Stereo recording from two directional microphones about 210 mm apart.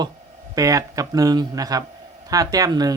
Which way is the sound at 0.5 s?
15° right (ahead or behind).